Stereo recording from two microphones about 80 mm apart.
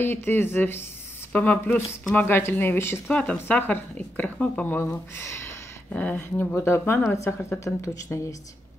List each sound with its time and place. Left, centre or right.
0.0 s speech: left
1.3 s speech: centre
3.1 s speech: centre
5.1 s a woman's voice: left
5.9 s speech: centre
6.1 s a woman's voice: left